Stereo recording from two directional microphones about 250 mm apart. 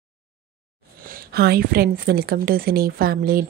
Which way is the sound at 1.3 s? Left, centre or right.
Right.